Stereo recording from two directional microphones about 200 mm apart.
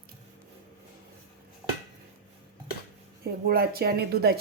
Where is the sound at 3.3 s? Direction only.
50° right (ahead or behind).